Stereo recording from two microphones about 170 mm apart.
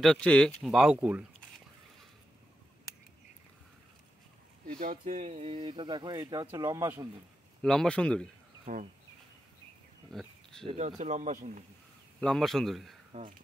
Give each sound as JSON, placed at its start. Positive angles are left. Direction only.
{"t": 0.0, "sound": "speech", "side_deg": 5}
{"t": 4.6, "sound": "speech", "side_deg": -55}
{"t": 7.6, "sound": "speech", "side_deg": 5}
{"t": 8.7, "sound": "speech", "side_deg": -50}
{"t": 10.1, "sound": "speech", "side_deg": 0}
{"t": 10.7, "sound": "speech", "side_deg": -40}
{"t": 12.2, "sound": "speech", "side_deg": 5}
{"t": 13.1, "sound": "speech", "side_deg": -30}